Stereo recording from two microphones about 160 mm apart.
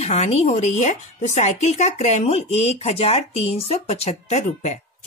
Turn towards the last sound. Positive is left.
turn(degrees=45)  # may be behind; listen again after turning